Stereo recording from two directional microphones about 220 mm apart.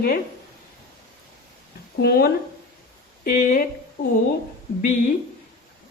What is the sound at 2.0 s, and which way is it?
A woman's voice, 45° left (ahead or behind).